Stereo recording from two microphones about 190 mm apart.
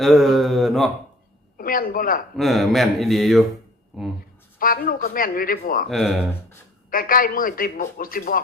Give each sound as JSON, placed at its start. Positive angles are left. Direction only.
{"t": 0.0, "sound": "mantra", "side_deg": 0}
{"t": 1.5, "sound": "speech", "side_deg": 50}
{"t": 2.3, "sound": "speech", "side_deg": 0}
{"t": 4.6, "sound": "a man's voice", "side_deg": 50}
{"t": 5.9, "sound": "speech", "side_deg": 0}
{"t": 6.9, "sound": "a man's voice", "side_deg": 50}